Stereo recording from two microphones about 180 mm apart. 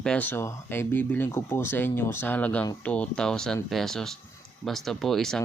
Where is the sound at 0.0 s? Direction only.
5° left (ahead or behind).